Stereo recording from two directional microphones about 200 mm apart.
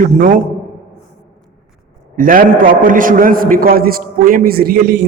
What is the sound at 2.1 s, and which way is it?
A man's voice, 45° right (ahead or behind).